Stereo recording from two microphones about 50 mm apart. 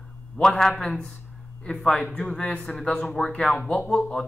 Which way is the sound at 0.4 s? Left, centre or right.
Centre.